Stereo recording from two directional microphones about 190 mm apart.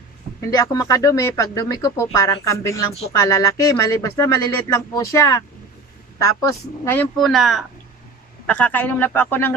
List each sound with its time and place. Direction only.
0.5 s speech: 20° left (ahead or behind)
7.2 s speech: centre (ahead or behind)